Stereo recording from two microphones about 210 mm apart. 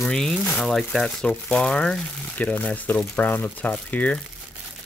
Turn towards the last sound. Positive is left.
turn(degrees=5)  # may be behind; listen again after turning